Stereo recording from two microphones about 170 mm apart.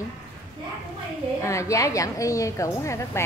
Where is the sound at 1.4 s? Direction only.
15° left (ahead or behind).